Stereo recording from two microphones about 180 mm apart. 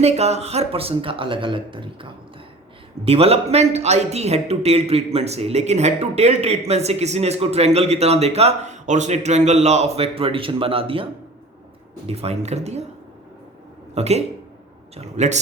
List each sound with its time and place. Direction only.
0.0 s a man's voice: 35° right (ahead or behind)
13.9 s a man's voice: 35° right (ahead or behind)